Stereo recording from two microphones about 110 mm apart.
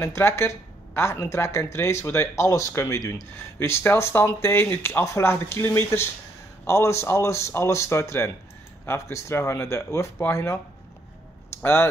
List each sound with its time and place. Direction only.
0.0 s speech: 25° left (ahead or behind)
11.6 s speech: 20° left (ahead or behind)